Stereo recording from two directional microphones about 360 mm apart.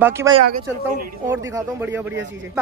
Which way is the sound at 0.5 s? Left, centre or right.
Right.